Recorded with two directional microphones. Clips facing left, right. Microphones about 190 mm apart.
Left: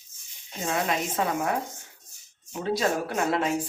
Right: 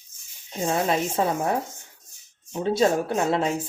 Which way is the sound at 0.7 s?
30° right (ahead or behind).